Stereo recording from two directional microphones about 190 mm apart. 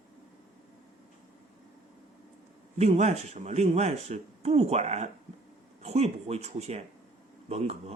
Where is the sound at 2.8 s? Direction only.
35° right (ahead or behind).